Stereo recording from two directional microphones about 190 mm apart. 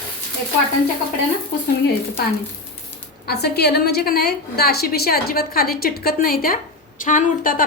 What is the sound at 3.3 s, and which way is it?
A woman's voice, 55° left (ahead or behind).